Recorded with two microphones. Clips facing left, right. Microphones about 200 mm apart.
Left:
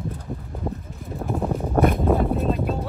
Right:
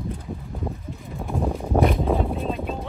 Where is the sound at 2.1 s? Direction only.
Centre (ahead or behind).